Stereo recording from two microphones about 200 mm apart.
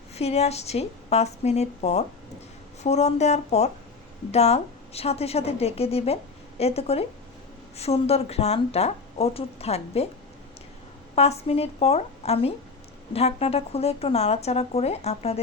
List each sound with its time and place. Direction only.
0.1 s speech: 30° left (ahead or behind)
11.1 s speech: 30° left (ahead or behind)